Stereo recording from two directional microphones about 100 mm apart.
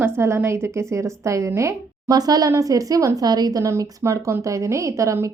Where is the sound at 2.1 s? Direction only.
40° right (ahead or behind).